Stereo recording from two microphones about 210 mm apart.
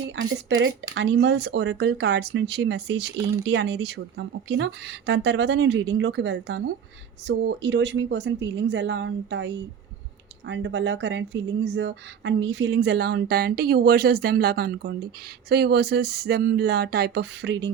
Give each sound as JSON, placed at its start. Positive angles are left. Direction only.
{"t": 0.2, "sound": "speech", "side_deg": -60}